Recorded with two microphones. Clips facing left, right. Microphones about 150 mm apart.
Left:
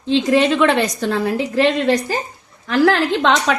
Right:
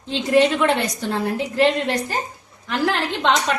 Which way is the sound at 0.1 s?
90° left.